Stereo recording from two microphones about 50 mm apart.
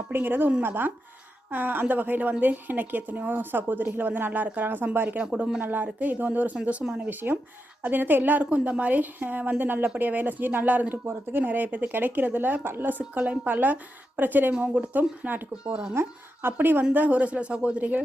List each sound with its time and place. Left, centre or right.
0.1 s a woman's voice: right
5.0 s speech: right
5.6 s a woman's voice: right
6.8 s speech: centre
7.1 s a woman's voice: right
11.0 s a woman's voice: right
15.6 s speech: centre
16.0 s a woman's voice: right
16.9 s speech: right